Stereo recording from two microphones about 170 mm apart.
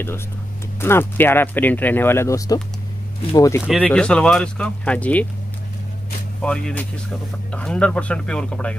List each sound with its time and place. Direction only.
0.7 s speech: 15° left (ahead or behind)
3.8 s speech: 5° left (ahead or behind)
6.4 s speech: 5° left (ahead or behind)